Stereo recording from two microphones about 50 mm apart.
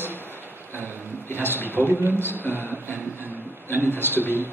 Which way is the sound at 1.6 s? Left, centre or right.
Right.